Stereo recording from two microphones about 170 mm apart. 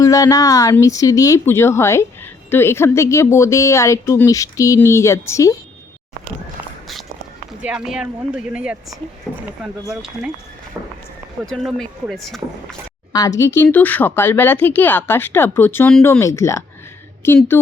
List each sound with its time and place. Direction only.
0.0 s speech: 20° left (ahead or behind)
7.6 s speech: 5° right (ahead or behind)
10.8 s speech: 15° right (ahead or behind)
11.4 s speech: centre (ahead or behind)
13.1 s speech: 20° left (ahead or behind)